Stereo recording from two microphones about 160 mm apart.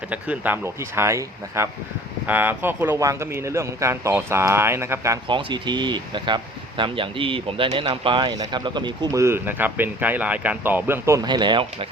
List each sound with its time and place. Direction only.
0.1 s a man's voice: 10° right (ahead or behind)
5.3 s speech: 30° right (ahead or behind)